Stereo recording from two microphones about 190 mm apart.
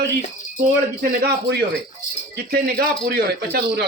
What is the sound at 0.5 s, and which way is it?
Speech, 55° right (ahead or behind).